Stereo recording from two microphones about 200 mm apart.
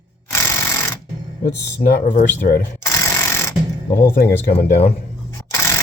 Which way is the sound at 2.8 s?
15° left (ahead or behind).